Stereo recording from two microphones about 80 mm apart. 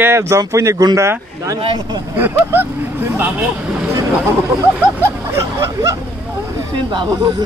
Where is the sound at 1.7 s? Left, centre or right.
Right.